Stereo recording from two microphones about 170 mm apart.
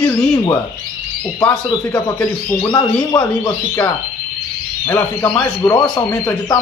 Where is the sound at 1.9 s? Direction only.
20° left (ahead or behind).